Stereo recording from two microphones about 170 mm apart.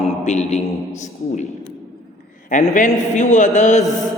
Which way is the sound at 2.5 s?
50° left (ahead or behind).